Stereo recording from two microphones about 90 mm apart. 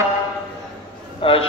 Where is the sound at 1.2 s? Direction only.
90° left.